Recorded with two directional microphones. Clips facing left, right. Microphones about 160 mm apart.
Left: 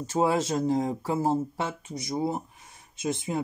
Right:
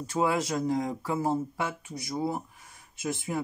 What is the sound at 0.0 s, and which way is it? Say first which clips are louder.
Speech: left 2 dB; 25° left (ahead or behind).